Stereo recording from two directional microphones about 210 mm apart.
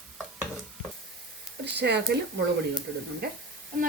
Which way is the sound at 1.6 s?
55° right (ahead or behind).